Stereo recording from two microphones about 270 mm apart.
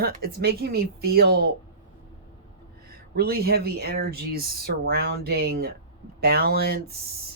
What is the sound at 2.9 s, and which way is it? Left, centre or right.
A woman's voice, right.